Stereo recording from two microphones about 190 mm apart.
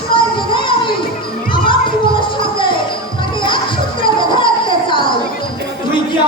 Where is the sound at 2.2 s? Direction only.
25° left (ahead or behind).